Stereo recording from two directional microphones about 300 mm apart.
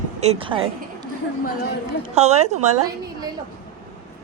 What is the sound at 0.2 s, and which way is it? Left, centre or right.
Speech, centre.